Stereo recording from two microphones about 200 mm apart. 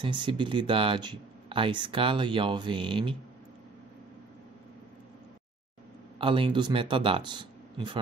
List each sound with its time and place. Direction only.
0.0 s speech: 25° right (ahead or behind)
6.1 s speech: 25° right (ahead or behind)